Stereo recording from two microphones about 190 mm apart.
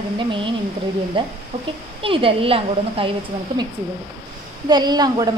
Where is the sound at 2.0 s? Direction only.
30° right (ahead or behind).